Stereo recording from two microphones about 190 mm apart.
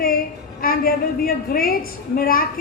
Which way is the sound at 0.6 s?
50° left (ahead or behind).